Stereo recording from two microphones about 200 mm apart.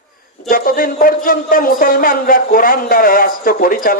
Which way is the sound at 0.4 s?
45° left (ahead or behind).